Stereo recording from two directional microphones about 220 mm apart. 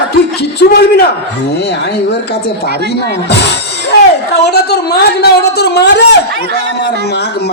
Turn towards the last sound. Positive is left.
turn(degrees=50)  # may be behind; listen again after turning